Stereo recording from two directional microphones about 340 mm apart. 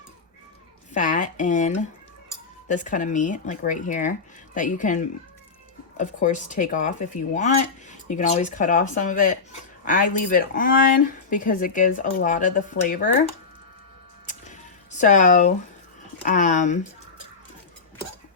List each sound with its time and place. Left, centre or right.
0.9 s speech: left
14.3 s a sound: left
16.2 s speech: left